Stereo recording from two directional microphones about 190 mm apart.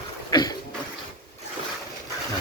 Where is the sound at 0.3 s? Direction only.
20° left (ahead or behind).